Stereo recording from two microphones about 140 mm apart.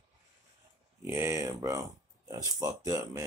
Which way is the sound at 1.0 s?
20° right (ahead or behind).